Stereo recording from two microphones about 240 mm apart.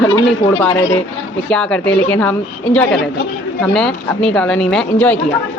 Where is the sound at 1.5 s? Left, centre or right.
Centre.